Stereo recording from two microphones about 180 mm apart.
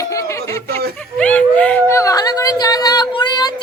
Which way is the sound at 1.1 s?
5° left (ahead or behind).